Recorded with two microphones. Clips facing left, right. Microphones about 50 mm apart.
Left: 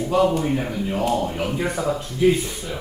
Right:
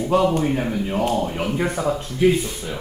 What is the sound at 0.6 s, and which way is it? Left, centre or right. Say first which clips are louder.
Speech: right 2 dB; centre.